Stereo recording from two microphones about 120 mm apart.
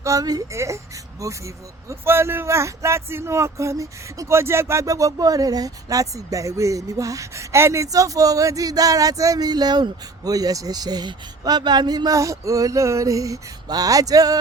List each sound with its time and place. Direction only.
0.0 s speech: 30° right (ahead or behind)